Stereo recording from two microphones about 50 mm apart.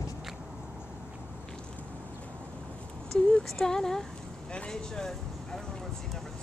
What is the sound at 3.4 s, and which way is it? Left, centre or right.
Speech, centre.